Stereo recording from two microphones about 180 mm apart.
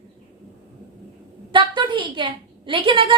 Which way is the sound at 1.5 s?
25° right (ahead or behind).